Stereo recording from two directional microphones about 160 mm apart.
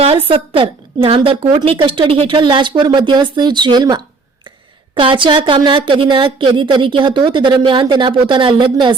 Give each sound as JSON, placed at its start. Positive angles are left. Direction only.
{"t": 0.0, "sound": "a woman's voice", "side_deg": -35}